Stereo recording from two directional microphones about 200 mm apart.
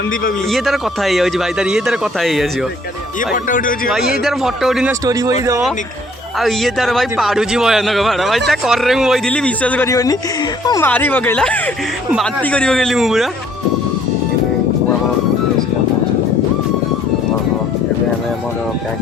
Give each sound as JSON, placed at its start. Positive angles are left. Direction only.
{"t": 0.5, "sound": "a man's voice", "side_deg": 0}
{"t": 3.3, "sound": "speech", "side_deg": 40}
{"t": 4.2, "sound": "a man's voice", "side_deg": 0}
{"t": 4.9, "sound": "speech", "side_deg": -20}
{"t": 6.4, "sound": "a man's voice", "side_deg": 0}